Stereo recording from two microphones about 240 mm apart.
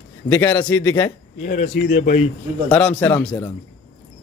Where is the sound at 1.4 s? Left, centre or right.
Left.